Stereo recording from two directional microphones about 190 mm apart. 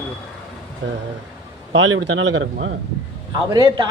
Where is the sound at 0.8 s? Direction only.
75° right (ahead or behind).